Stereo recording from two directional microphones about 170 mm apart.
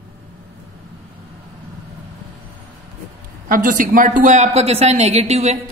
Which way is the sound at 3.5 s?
50° right (ahead or behind).